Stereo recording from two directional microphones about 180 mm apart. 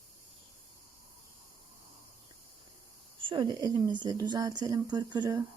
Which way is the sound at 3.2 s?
25° right (ahead or behind).